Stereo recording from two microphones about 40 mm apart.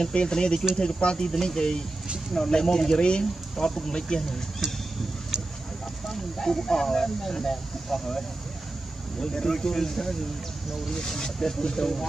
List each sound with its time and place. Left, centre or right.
0.1 s speech: left
1.2 s speech: centre
5.3 s a sound: centre
6.3 s speech: centre
9.2 s speech: centre